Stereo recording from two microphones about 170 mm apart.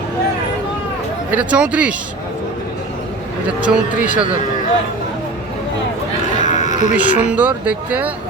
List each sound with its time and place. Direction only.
1.3 s speech: 10° right (ahead or behind)
3.6 s speech: 10° right (ahead or behind)
6.4 s livestock: 45° left (ahead or behind)
6.9 s speech: 10° right (ahead or behind)